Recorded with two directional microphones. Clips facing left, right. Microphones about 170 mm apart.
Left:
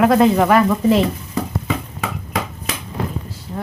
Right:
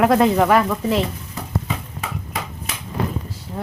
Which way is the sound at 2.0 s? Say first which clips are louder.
Left 4 dB; 90° left.